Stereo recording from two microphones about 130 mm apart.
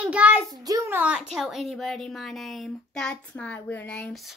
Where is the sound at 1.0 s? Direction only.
5° right (ahead or behind); by 4.0 s 10° left (ahead or behind).